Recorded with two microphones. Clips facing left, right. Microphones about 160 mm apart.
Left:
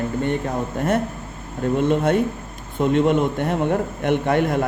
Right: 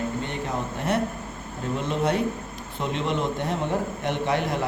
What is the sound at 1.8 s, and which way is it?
A man's voice, 55° left (ahead or behind).